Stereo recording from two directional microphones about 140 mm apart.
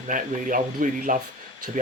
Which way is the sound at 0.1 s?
70° right (ahead or behind).